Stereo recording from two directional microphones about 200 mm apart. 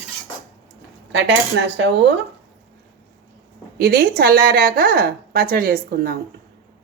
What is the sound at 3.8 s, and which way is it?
A woman's voice, 50° right (ahead or behind).